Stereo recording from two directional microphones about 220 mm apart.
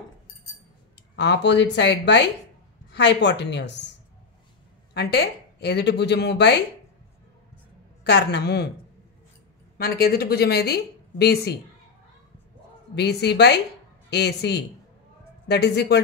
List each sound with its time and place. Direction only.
1.1 s speech: 50° left (ahead or behind)
4.9 s speech: 45° left (ahead or behind)
8.0 s speech: 50° left (ahead or behind)
9.8 s speech: 45° left (ahead or behind)
12.9 s speech: 50° left (ahead or behind)